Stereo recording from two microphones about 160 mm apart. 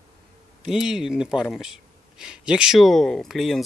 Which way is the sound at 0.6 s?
5° right (ahead or behind).